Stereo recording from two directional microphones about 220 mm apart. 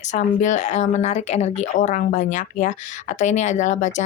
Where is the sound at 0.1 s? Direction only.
35° left (ahead or behind).